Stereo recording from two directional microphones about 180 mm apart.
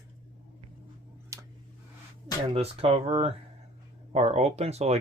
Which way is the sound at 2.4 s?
35° right (ahead or behind).